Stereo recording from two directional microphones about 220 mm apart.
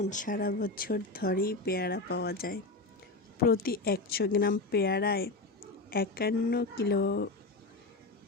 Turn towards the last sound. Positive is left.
turn(degrees=50)  # may be behind; listen again after turning